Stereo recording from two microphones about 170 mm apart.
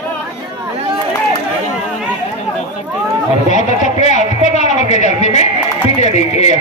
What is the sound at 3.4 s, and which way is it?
Speech, 45° left (ahead or behind).